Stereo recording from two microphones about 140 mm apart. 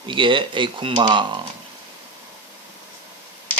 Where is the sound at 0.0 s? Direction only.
35° right (ahead or behind).